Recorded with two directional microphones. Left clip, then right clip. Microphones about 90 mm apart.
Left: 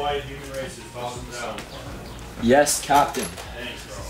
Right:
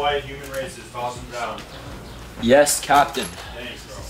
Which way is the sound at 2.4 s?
10° right (ahead or behind).